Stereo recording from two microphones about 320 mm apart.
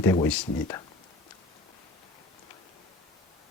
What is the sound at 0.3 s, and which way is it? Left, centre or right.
Speech, centre.